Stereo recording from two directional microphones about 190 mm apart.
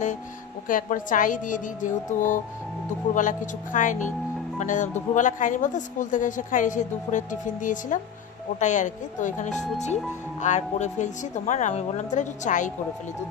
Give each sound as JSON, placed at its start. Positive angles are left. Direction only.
{"t": 0.7, "sound": "a woman's voice", "side_deg": 45}